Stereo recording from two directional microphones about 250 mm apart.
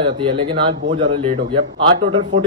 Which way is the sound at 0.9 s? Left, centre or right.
Right.